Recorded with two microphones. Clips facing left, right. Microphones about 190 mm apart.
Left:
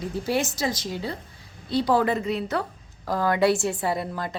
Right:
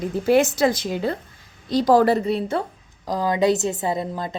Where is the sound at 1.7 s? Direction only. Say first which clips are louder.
Right 5 dB; 40° right (ahead or behind).